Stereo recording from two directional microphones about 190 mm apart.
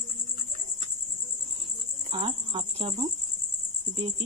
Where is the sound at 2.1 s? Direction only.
30° right (ahead or behind).